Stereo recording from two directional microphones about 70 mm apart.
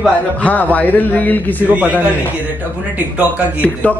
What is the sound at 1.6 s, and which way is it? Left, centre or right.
Speech, right.